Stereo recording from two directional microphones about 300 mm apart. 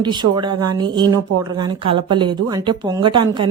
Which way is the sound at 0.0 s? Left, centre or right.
Centre.